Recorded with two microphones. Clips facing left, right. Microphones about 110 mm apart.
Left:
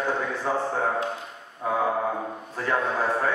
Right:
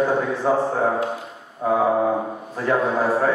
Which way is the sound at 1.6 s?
15° right (ahead or behind).